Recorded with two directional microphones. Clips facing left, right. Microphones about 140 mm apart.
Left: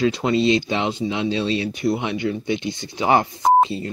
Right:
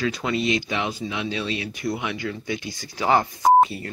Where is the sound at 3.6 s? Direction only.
25° left (ahead or behind).